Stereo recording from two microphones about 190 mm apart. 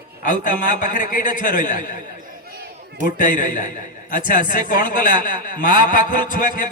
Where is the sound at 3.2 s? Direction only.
45° left (ahead or behind).